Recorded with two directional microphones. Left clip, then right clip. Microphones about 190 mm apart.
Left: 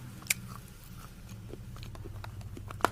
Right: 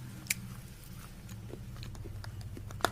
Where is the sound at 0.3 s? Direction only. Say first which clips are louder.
Left 3 dB; 20° left (ahead or behind).